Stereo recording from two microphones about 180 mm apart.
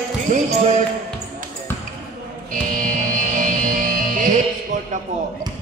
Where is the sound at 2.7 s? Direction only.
45° right (ahead or behind).